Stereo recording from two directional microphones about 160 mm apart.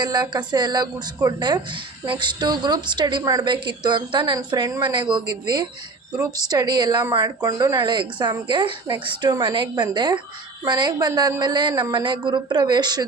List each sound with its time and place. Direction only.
0.0 s a woman's voice: 25° right (ahead or behind)